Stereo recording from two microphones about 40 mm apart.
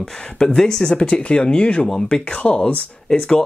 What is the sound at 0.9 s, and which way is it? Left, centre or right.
Speech, left.